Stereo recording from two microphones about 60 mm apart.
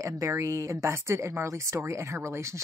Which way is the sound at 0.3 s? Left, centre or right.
Right.